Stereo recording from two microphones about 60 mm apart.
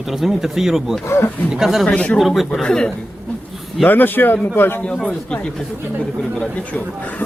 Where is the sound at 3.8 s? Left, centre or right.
Left.